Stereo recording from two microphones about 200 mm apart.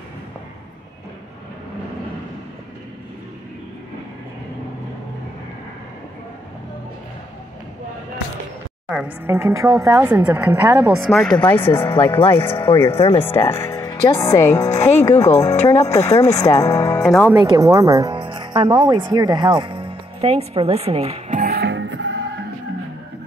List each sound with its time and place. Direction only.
8.8 s speech: 5° right (ahead or behind)
11.1 s a woman's voice: centre (ahead or behind)
12.9 s speech: 30° left (ahead or behind)
13.2 s a woman's voice: 10° left (ahead or behind)
17.3 s speech: 15° right (ahead or behind); by 21.5 s 35° right (ahead or behind)
21.5 s music: 55° right (ahead or behind)